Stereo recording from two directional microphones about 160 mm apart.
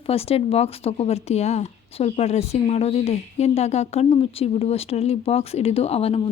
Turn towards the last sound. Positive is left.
turn(degrees=40)  # may be behind; listen again after turning